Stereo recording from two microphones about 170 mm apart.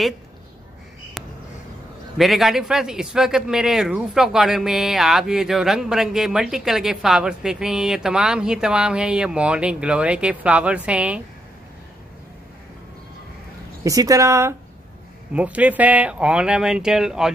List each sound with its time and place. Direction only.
1.2 s a sound: centre (ahead or behind)
2.1 s a man's voice: centre (ahead or behind)
13.8 s a man's voice: 20° right (ahead or behind); by 17.3 s 5° right (ahead or behind)